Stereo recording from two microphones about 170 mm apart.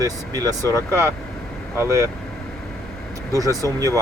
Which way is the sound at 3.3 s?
20° right (ahead or behind).